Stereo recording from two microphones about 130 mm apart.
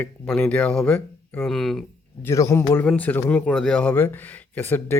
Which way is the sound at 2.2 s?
25° left (ahead or behind).